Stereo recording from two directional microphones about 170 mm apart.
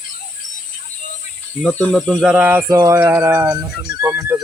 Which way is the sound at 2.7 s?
20° right (ahead or behind).